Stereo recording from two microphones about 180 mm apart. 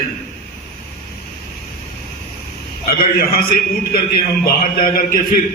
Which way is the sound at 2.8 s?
55° left (ahead or behind).